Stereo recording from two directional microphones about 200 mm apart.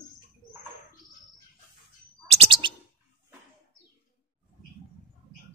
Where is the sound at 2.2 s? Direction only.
30° right (ahead or behind).